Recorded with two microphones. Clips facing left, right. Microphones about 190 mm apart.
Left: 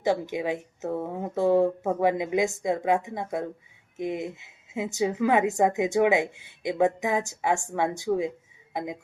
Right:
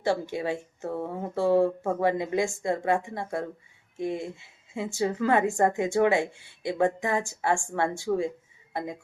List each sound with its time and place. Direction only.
0.0 s a woman's voice: 15° left (ahead or behind)